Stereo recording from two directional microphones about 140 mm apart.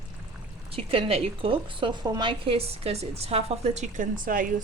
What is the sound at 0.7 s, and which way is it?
A woman's voice, 40° right (ahead or behind).